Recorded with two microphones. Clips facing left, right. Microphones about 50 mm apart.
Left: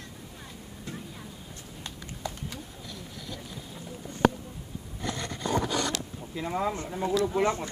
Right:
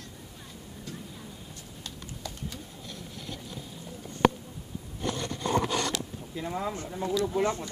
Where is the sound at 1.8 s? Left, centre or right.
Left.